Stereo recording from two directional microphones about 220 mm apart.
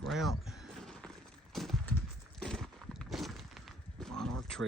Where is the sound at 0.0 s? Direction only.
Centre (ahead or behind).